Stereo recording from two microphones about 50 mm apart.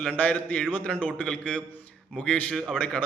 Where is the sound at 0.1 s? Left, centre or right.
Left.